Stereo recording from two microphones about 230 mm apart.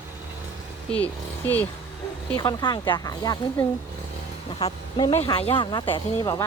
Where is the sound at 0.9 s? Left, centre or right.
Centre.